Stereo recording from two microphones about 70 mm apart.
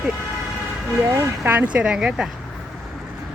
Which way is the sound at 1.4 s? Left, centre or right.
Right.